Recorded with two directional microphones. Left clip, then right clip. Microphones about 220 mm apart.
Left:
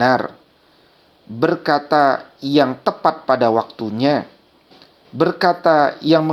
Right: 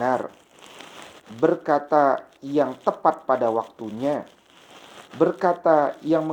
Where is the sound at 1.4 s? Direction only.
35° left (ahead or behind).